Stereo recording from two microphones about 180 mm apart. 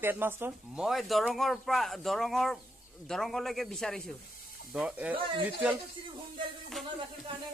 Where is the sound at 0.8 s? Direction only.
Centre (ahead or behind).